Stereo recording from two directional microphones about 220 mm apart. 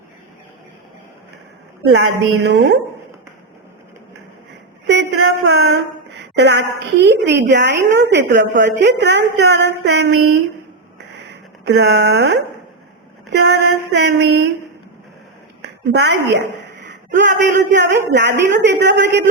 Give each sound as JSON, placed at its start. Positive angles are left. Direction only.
{"t": 1.9, "sound": "a woman's voice", "side_deg": -50}
{"t": 4.9, "sound": "a sound", "side_deg": -50}
{"t": 8.1, "sound": "a woman's voice", "side_deg": -55}
{"t": 11.6, "sound": "a woman's voice", "side_deg": -50}
{"t": 15.6, "sound": "a woman's voice", "side_deg": -50}
{"t": 17.2, "sound": "music", "side_deg": -35}
{"t": 17.7, "sound": "a woman's voice", "side_deg": -50}